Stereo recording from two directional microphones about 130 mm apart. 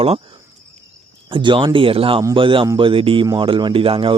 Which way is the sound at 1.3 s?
40° right (ahead or behind).